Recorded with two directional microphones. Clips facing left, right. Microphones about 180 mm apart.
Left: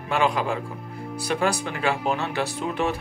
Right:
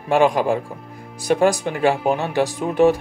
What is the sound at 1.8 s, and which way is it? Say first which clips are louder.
Speech: right 7 dB; 45° right (ahead or behind).